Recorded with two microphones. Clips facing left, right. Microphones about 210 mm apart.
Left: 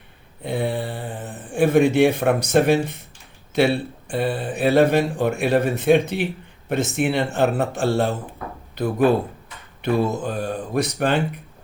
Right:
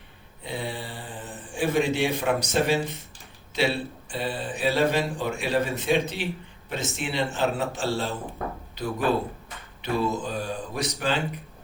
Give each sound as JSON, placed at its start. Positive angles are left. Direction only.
{"t": 0.4, "sound": "speech", "side_deg": 55}
{"t": 4.1, "sound": "speech", "side_deg": 55}